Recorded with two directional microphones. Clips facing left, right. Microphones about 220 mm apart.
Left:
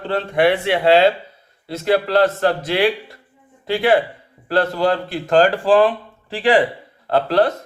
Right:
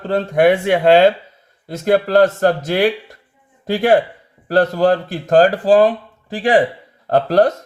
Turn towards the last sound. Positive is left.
turn(degrees=-45)  # may be behind; listen again after turning